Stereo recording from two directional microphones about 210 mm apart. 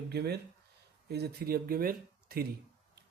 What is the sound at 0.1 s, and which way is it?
Speech, 50° right (ahead or behind).